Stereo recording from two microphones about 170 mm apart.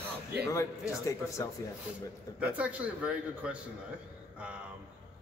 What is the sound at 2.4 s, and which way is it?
A man's voice, 10° right (ahead or behind).